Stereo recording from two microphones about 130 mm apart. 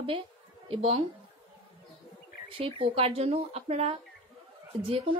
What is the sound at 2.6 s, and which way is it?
A woman's voice, 50° right (ahead or behind).